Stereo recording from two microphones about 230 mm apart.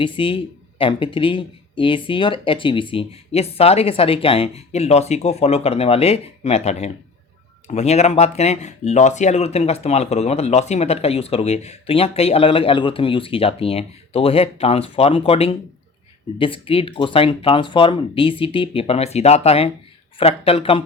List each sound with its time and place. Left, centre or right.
0.0 s speech: left